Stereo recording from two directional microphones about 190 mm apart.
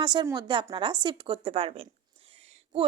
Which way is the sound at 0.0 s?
25° right (ahead or behind).